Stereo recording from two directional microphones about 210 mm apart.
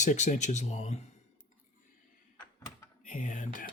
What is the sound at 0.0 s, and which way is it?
Speech, 35° left (ahead or behind).